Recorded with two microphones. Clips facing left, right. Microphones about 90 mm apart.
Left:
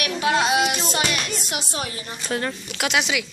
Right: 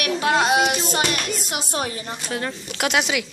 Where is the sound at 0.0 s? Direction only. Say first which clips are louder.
Right 1 dB; 45° right (ahead or behind).